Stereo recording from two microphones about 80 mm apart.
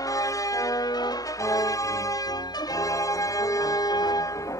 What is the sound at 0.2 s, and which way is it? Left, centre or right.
Music, left.